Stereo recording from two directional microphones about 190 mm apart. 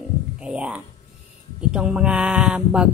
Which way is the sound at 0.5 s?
5° right (ahead or behind).